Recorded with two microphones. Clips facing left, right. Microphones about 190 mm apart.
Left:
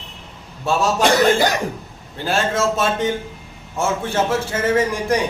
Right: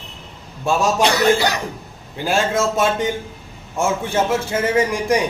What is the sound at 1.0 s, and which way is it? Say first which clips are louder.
Speech: left 3 dB; 50° left (ahead or behind).